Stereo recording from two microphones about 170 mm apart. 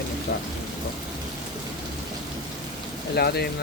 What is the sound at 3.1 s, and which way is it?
Speech, 70° left (ahead or behind).